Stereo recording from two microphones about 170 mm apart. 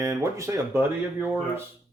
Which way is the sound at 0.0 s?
15° right (ahead or behind).